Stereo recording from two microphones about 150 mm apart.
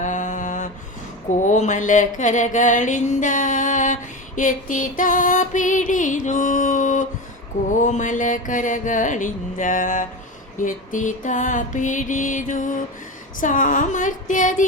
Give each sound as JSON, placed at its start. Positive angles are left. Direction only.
{"t": 0.0, "sound": "mantra", "side_deg": 55}
{"t": 1.4, "sound": "a sound", "side_deg": 55}
{"t": 7.8, "sound": "mantra", "side_deg": 55}